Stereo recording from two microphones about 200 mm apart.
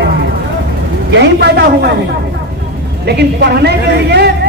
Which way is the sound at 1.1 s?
55° right (ahead or behind).